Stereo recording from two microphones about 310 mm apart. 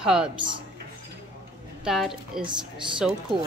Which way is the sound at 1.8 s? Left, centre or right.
Centre.